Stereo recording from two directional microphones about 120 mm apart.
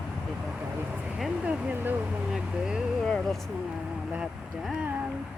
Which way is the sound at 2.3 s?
Centre (ahead or behind).